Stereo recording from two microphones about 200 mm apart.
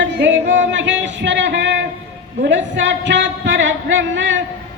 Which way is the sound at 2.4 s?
65° right (ahead or behind).